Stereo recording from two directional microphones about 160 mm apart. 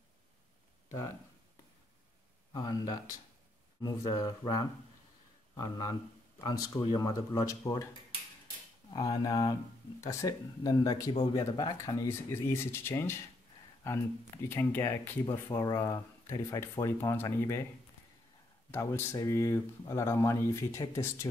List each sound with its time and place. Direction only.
2.5 s speech: 25° left (ahead or behind)
8.9 s speech: 25° left (ahead or behind)
12.1 s speech: 15° left (ahead or behind)
18.7 s speech: 15° left (ahead or behind)